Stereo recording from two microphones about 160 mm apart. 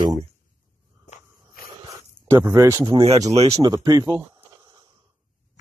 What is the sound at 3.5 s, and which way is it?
Speech, 20° right (ahead or behind).